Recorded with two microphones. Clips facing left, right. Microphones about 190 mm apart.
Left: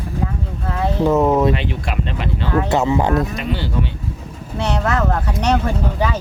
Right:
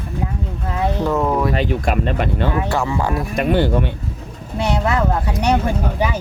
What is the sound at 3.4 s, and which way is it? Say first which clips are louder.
Speech: right 7 dB; 55° right (ahead or behind).